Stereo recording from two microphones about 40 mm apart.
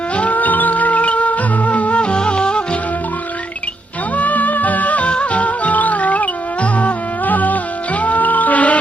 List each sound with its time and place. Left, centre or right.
0.1 s music: left
4.1 s music: left